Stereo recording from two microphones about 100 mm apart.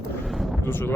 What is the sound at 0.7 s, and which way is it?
Speech, 20° left (ahead or behind).